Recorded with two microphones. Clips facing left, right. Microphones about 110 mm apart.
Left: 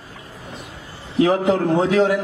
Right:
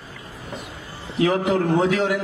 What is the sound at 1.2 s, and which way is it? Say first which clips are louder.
Speech: left 3 dB; 30° left (ahead or behind).